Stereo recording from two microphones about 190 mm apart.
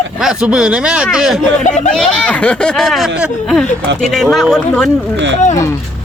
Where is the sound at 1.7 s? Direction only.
40° left (ahead or behind).